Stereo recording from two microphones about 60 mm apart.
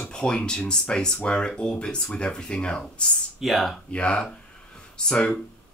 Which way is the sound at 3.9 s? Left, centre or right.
Centre.